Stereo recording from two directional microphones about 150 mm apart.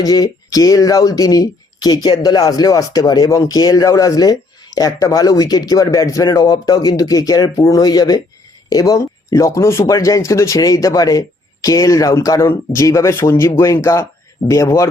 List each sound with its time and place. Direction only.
0.0 s speech: 25° left (ahead or behind)